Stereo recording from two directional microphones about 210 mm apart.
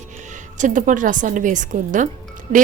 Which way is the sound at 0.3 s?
35° right (ahead or behind).